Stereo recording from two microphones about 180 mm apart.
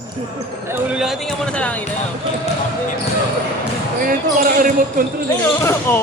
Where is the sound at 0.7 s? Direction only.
5° right (ahead or behind).